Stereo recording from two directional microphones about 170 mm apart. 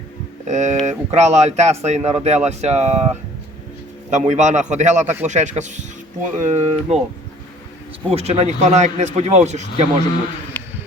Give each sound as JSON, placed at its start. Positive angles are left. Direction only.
{"t": 0.4, "sound": "a man's voice", "side_deg": -45}
{"t": 4.1, "sound": "a man's voice", "side_deg": -45}
{"t": 8.1, "sound": "speech", "side_deg": -40}
{"t": 10.5, "sound": "a sound", "side_deg": 10}